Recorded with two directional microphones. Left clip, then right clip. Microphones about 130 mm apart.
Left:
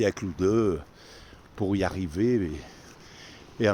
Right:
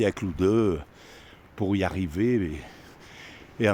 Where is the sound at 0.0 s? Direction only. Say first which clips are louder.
Right 1 dB; 40° right (ahead or behind).